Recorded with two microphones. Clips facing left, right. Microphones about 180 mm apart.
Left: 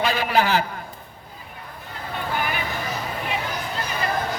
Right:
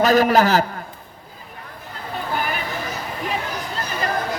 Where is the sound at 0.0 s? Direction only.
40° right (ahead or behind).